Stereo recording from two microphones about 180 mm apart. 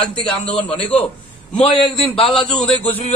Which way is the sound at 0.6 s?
5° left (ahead or behind).